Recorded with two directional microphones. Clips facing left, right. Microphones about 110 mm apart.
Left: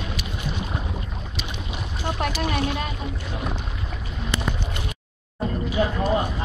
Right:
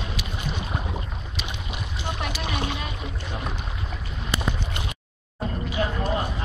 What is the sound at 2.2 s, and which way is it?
Speech, 55° left (ahead or behind).